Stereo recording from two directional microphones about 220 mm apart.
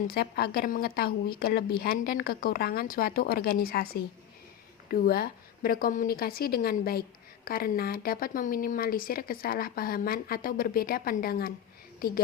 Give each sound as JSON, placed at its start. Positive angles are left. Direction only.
{"t": 0.1, "sound": "a woman's voice", "side_deg": 45}